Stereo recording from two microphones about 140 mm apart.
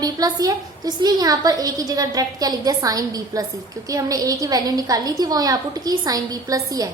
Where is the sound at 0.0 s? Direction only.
25° right (ahead or behind).